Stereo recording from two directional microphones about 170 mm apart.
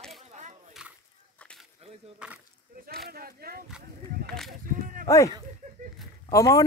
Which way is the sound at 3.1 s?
60° right (ahead or behind).